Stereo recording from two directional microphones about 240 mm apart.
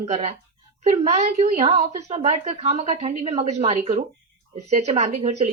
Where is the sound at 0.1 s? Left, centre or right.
Right.